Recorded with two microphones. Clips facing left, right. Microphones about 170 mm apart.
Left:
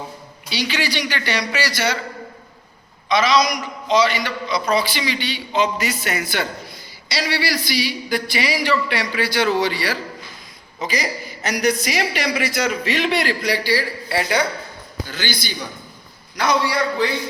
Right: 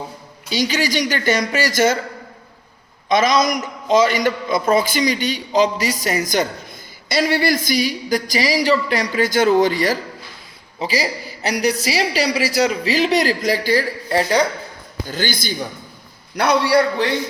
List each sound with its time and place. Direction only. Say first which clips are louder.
0.5 s speech: right 4 dB; 45° right (ahead or behind)
3.1 s a woman's voice: right 2 dB; 50° right (ahead or behind)
10.8 s a woman's voice: right 3 dB; 35° right (ahead or behind)
16.3 s a man's voice: right 5 dB; 65° right (ahead or behind)